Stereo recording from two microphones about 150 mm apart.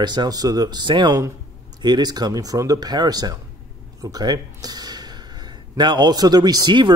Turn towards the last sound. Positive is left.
turn(degrees=-30)  # may be behind; listen again after turning